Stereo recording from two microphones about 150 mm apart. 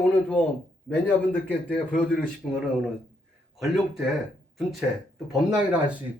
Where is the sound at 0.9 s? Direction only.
10° left (ahead or behind).